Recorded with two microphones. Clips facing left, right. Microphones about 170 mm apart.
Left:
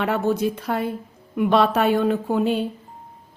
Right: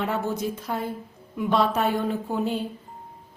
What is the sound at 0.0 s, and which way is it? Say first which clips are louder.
A woman's voice: left 5 dB; 70° left (ahead or behind).